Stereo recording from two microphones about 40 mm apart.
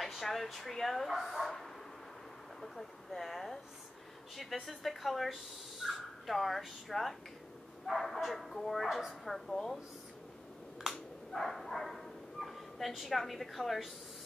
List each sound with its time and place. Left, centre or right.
0.0 s speech: centre
11.3 s speech: centre